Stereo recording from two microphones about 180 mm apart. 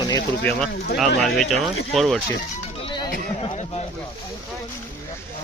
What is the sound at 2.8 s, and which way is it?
Music, 30° left (ahead or behind).